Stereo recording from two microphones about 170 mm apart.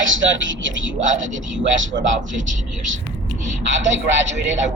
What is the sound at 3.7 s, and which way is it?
Speech, 90° right.